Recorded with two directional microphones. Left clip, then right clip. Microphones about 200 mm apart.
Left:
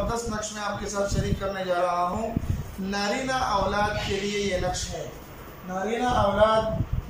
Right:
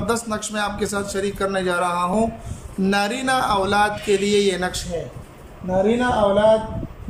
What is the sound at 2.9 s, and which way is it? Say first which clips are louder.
Speech: right 6 dB; 55° right (ahead or behind).